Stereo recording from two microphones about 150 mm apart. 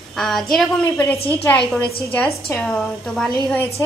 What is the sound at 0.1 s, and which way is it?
Speech, centre (ahead or behind).